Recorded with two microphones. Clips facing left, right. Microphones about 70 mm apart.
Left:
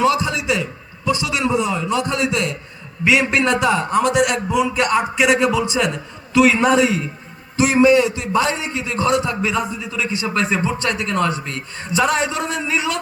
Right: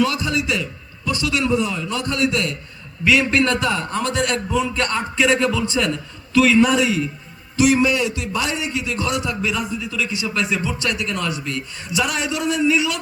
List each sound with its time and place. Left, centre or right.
0.0 s a man's voice: left